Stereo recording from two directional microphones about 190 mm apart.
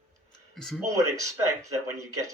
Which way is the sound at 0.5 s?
Centre (ahead or behind).